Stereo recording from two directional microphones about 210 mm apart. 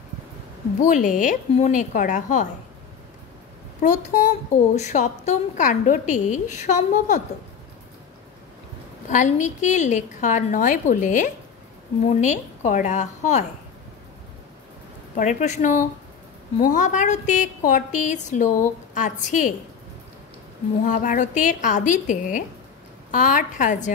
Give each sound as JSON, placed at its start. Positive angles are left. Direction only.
{"t": 0.8, "sound": "speech", "side_deg": 40}
{"t": 3.8, "sound": "speech", "side_deg": 35}
{"t": 9.1, "sound": "speech", "side_deg": 35}
{"t": 15.1, "sound": "speech", "side_deg": 35}
{"t": 20.8, "sound": "speech", "side_deg": 35}